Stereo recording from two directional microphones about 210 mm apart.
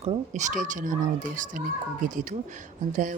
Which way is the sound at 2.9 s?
40° right (ahead or behind).